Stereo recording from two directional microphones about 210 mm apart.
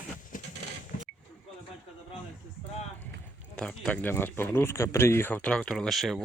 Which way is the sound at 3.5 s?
5° left (ahead or behind).